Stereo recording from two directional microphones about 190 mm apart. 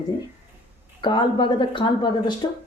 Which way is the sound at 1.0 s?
25° left (ahead or behind).